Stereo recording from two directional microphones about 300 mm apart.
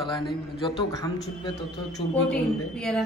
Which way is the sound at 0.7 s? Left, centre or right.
Centre.